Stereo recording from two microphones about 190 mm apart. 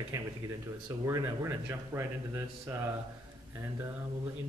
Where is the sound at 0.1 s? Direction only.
15° right (ahead or behind).